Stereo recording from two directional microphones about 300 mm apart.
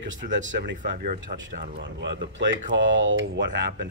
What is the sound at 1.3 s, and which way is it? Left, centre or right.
Speech, right.